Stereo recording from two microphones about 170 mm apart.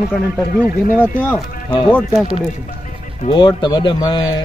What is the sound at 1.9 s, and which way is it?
Speech, 10° left (ahead or behind).